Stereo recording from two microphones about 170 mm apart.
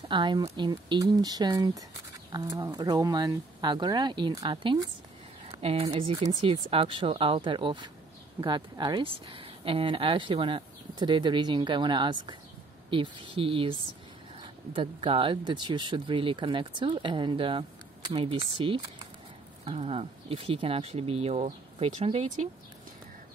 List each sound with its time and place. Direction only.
0.1 s speech: 25° right (ahead or behind)
5.5 s speech: 35° right (ahead or behind)